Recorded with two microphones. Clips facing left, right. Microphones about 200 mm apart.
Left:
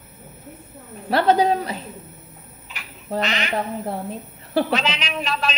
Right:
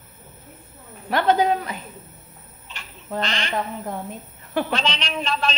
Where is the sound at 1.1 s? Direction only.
35° left (ahead or behind).